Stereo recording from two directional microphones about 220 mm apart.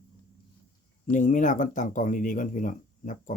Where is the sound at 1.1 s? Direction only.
35° left (ahead or behind).